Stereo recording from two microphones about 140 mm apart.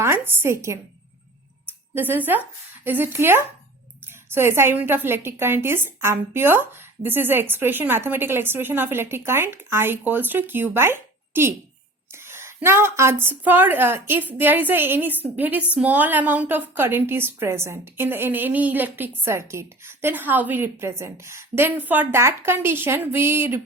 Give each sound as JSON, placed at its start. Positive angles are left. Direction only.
{"t": 0.0, "sound": "a woman's voice", "side_deg": -20}